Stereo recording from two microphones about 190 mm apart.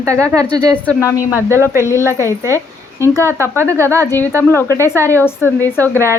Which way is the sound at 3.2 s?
15° right (ahead or behind).